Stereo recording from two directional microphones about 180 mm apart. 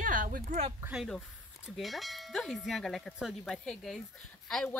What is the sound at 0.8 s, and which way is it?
Speech, 10° right (ahead or behind).